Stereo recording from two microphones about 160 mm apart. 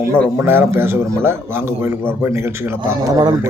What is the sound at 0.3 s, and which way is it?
A man's voice, 15° right (ahead or behind).